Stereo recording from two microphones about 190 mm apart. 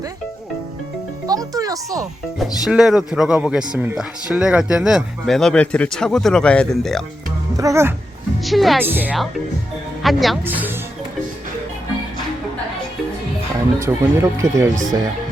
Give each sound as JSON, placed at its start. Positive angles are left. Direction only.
{"t": 1.3, "sound": "a child's voice", "side_deg": -20}
{"t": 2.4, "sound": "speech", "side_deg": -5}
{"t": 7.5, "sound": "speech", "side_deg": -15}
{"t": 8.4, "sound": "speech", "side_deg": 0}
{"t": 10.4, "sound": "speech", "side_deg": -10}
{"t": 13.7, "sound": "speech", "side_deg": -15}